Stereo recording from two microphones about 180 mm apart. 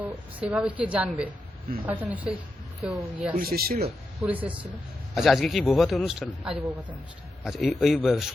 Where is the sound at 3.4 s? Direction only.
55° right (ahead or behind).